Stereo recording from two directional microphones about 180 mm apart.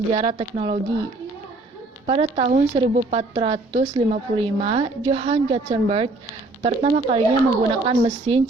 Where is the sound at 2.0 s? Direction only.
35° right (ahead or behind).